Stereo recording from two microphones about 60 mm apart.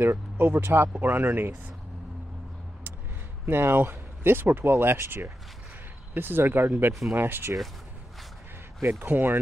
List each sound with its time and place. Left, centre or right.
0.0 s speech: right
3.4 s speech: right
8.8 s speech: right